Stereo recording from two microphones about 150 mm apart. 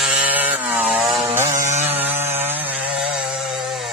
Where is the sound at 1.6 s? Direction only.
55° right (ahead or behind).